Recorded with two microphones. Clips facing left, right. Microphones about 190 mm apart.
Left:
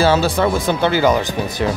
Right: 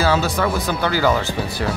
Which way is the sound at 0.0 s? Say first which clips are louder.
Left 4 dB; 30° left (ahead or behind).